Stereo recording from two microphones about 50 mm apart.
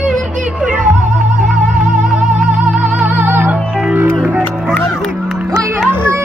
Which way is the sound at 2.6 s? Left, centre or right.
Right.